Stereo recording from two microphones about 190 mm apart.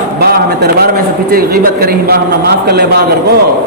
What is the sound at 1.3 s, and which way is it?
A man's voice, 50° right (ahead or behind).